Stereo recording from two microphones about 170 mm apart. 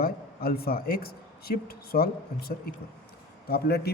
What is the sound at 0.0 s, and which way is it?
A man's voice, 65° left (ahead or behind).